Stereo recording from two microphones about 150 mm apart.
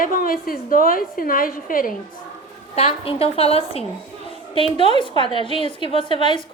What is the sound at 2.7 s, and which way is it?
A woman's voice, 40° left (ahead or behind).